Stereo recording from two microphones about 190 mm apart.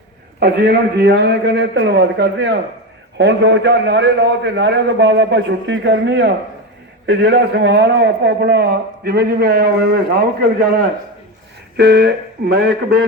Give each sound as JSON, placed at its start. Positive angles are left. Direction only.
{"t": 0.3, "sound": "a man's voice", "side_deg": -60}